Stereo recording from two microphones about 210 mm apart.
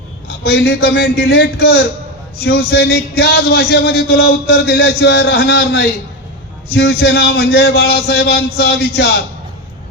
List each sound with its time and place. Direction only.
0.3 s speech: 50° left (ahead or behind)